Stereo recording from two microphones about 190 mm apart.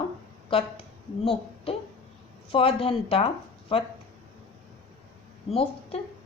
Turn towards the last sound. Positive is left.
turn(degrees=30)  # may be behind; listen again after turning